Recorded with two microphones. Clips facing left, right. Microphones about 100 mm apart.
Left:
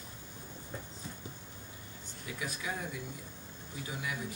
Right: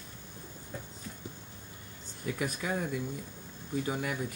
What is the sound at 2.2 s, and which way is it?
Speech, 50° right (ahead or behind).